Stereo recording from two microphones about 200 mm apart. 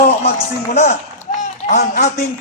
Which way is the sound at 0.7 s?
35° left (ahead or behind).